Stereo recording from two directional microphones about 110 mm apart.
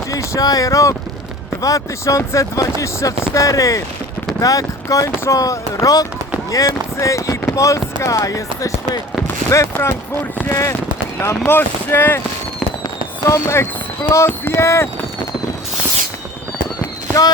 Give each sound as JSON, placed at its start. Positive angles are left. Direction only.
{"t": 0.1, "sound": "speech", "side_deg": 30}
{"t": 13.2, "sound": "speech", "side_deg": 25}